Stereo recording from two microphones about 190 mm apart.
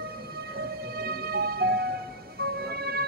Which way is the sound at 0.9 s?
55° right (ahead or behind).